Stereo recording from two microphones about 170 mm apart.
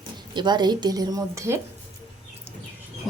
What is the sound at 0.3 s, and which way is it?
A woman's voice, 25° right (ahead or behind).